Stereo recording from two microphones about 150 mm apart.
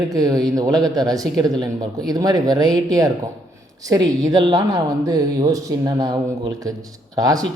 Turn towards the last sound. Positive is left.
turn(degrees=-25)  # may be behind; listen again after turning